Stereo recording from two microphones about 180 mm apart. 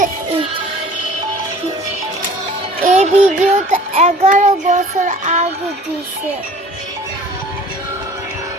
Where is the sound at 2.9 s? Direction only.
40° right (ahead or behind).